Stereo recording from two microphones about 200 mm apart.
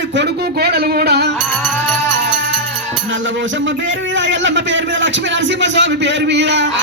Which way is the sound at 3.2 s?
70° right (ahead or behind).